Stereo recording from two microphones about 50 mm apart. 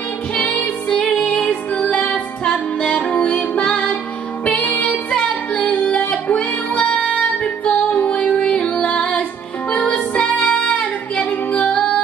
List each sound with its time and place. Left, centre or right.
0.4 s music: left
1.5 s music: left
4.8 s music: centre
11.1 s female singing: left